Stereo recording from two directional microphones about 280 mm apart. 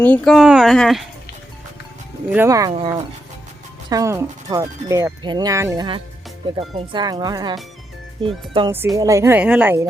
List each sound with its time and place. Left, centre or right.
0.0 s speech: centre
2.3 s speech: centre
8.5 s speech: centre